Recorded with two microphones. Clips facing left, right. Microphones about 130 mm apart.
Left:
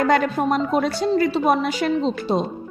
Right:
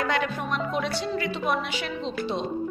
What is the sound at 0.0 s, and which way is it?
Speech, 45° left (ahead or behind).